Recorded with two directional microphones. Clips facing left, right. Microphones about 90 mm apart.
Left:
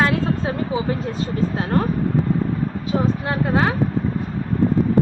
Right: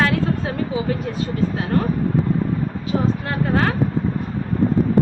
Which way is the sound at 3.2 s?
15° left (ahead or behind).